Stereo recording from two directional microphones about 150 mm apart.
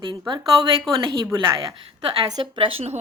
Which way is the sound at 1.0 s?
30° right (ahead or behind).